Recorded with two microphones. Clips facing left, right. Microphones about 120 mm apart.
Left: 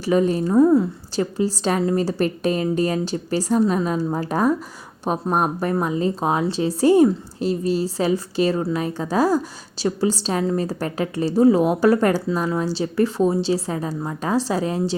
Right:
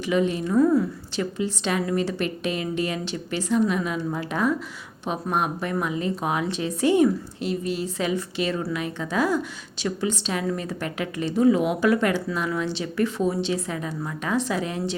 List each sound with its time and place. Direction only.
0.0 s a woman's voice: 40° left (ahead or behind)
0.6 s a woman's voice: 25° left (ahead or behind)
1.1 s a woman's voice: 35° left (ahead or behind)